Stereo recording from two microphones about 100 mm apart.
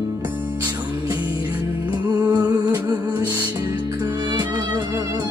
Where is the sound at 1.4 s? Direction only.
45° right (ahead or behind).